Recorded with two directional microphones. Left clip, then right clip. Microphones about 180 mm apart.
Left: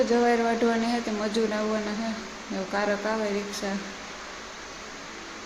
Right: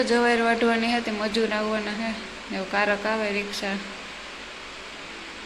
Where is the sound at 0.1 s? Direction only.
Centre (ahead or behind).